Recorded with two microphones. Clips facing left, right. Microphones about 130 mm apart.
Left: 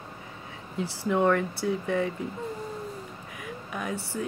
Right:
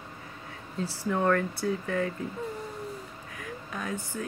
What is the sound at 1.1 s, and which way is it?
Speech, 15° left (ahead or behind).